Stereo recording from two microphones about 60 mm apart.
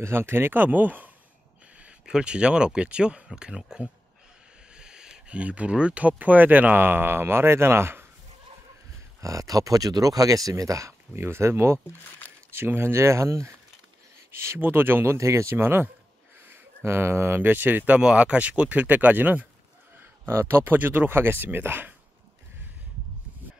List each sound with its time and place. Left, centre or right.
0.0 s speech: right
1.8 s speech: centre
4.7 s a sound: centre
5.4 s speech: right
9.2 s speech: right
14.3 s speech: right
15.1 s speech: right
15.5 s speech: right
20.0 s speech: right